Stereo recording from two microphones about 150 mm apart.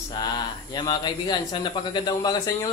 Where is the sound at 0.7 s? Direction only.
30° left (ahead or behind).